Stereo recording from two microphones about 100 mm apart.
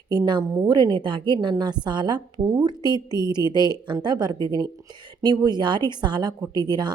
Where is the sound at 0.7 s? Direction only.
50° right (ahead or behind).